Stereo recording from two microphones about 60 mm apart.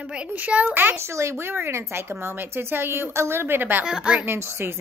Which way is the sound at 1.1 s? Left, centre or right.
Right.